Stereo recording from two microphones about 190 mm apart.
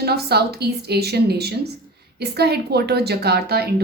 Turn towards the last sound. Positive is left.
turn(degrees=-55)  # may be behind; listen again after turning